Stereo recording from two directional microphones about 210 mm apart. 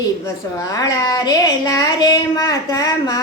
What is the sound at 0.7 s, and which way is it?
Speech, 15° left (ahead or behind).